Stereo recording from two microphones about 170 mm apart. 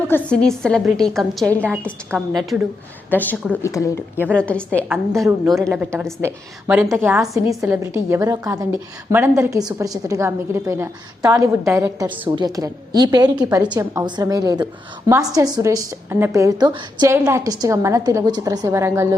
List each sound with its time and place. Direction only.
0.1 s speech: 5° left (ahead or behind)
3.1 s a woman's voice: 10° left (ahead or behind)
5.7 s a woman's voice: 10° right (ahead or behind)
12.4 s a woman's voice: 20° right (ahead or behind)